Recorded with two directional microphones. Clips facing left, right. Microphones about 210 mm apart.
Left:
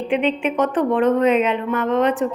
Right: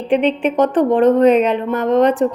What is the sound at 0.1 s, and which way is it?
A woman's voice, 35° right (ahead or behind).